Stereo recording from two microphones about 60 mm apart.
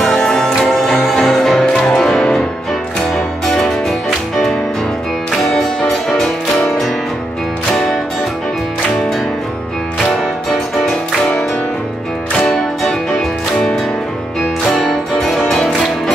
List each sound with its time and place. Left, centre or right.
0.0 s music: centre
5.6 s music: centre
12.4 s music: centre
14.9 s music: centre